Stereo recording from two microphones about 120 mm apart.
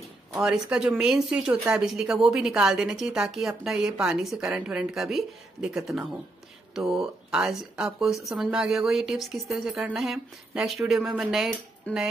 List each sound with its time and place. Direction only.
0.3 s speech: 5° right (ahead or behind)